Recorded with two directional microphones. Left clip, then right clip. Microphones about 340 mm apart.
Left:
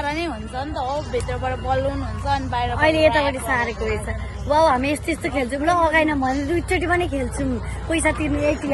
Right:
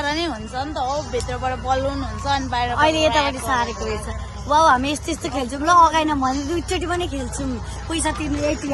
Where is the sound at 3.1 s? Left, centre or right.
Right.